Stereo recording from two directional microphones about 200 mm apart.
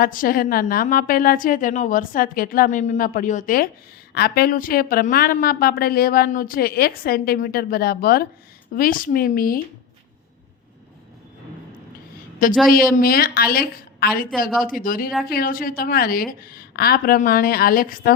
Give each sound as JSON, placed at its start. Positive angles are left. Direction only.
{"t": 0.0, "sound": "a woman's voice", "side_deg": 45}
{"t": 12.6, "sound": "a woman's voice", "side_deg": 45}